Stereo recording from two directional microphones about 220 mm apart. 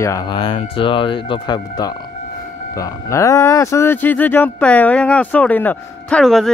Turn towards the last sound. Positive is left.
turn(degrees=0)  # may be behind; listen again after turning